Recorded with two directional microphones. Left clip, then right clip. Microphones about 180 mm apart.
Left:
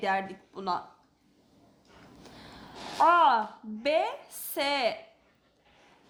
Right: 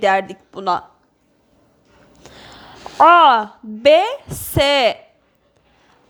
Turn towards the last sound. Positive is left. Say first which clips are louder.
# right 14 dB
turn(degrees=-45)  # may be behind; listen again after turning